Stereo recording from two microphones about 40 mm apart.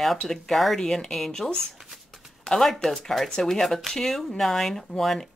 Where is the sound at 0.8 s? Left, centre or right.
Centre.